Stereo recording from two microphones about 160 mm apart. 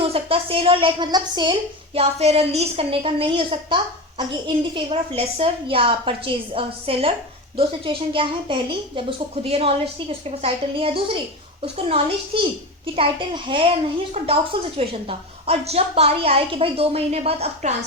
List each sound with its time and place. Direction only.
0.0 s a woman's voice: 35° right (ahead or behind)
2.0 s a woman's voice: 40° right (ahead or behind)
14.8 s a woman's voice: 40° right (ahead or behind)